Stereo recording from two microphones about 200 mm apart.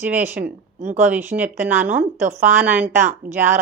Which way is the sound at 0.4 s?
55° right (ahead or behind).